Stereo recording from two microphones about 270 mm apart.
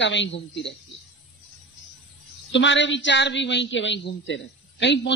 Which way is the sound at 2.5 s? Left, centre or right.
Left.